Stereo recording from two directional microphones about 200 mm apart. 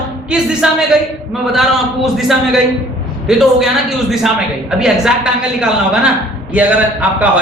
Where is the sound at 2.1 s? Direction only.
Centre (ahead or behind).